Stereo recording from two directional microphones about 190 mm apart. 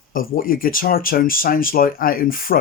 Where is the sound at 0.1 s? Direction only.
50° left (ahead or behind).